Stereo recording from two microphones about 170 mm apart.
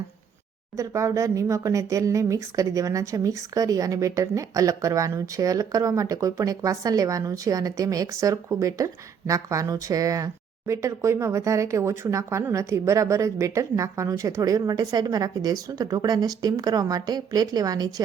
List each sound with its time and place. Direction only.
0.8 s speech: 20° right (ahead or behind)